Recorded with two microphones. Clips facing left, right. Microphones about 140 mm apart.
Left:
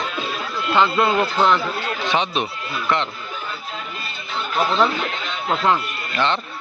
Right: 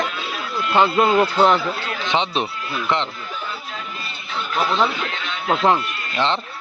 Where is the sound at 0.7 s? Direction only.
20° right (ahead or behind).